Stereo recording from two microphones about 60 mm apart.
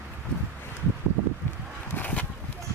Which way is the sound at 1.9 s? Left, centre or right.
Left.